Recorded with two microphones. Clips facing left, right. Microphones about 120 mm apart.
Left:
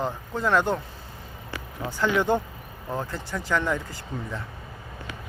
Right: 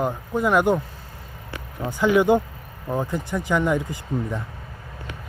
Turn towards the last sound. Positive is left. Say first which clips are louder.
# right 6 dB
turn(degrees=-15)  # may be behind; listen again after turning